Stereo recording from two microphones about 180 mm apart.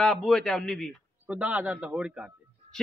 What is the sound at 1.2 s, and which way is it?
A man's voice, 10° right (ahead or behind).